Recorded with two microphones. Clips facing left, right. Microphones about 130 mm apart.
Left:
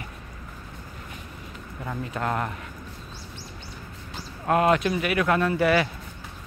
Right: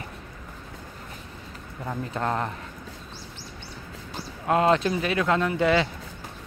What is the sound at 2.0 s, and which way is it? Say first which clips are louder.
Speech: even; 25° right (ahead or behind).